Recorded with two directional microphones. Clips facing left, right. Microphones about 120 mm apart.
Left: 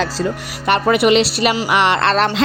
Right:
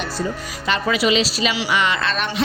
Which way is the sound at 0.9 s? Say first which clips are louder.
Left 5 dB; 60° left (ahead or behind).